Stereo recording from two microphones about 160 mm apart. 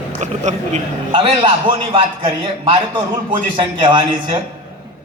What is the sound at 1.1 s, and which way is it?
A man's voice, 35° right (ahead or behind).